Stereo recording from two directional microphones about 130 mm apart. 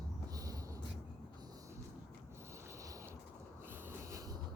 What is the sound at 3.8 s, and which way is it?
Snort, 20° right (ahead or behind).